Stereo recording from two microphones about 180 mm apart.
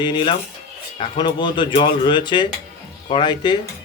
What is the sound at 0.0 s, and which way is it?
Speech, 25° left (ahead or behind).